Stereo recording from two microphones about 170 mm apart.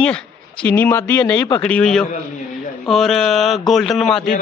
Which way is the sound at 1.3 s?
25° left (ahead or behind).